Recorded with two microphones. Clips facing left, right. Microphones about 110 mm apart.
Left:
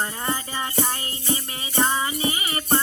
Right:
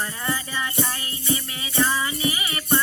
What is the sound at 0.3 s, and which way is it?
Music, 30° left (ahead or behind).